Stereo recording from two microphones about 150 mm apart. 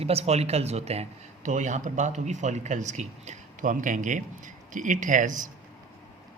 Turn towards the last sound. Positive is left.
turn(degrees=-60)  # may be behind; listen again after turning